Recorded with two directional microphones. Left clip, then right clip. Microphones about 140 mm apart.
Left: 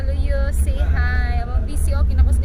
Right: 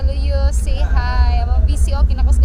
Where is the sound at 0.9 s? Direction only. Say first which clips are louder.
Right 3 dB; 20° left (ahead or behind).